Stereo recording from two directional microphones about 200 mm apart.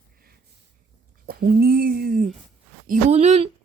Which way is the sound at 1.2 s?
50° right (ahead or behind).